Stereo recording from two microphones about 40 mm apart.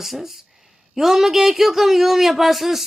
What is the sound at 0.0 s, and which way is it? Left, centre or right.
A woman's voice, centre.